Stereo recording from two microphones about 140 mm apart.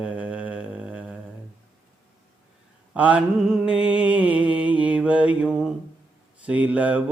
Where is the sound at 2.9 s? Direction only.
10° right (ahead or behind).